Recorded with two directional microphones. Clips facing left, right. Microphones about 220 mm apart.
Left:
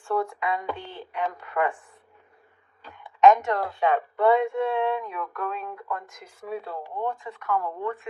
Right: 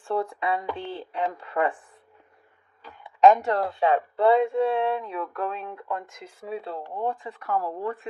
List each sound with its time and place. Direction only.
0.0 s speech: 30° right (ahead or behind)
3.2 s speech: 35° right (ahead or behind)